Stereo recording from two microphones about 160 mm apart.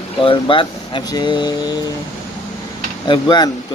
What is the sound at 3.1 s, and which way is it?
Speech, 30° left (ahead or behind).